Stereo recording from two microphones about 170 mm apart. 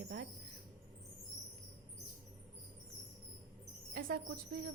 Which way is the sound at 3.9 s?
65° right (ahead or behind).